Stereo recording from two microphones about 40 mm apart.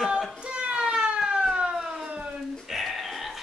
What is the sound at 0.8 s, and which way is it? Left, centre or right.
Siren, centre.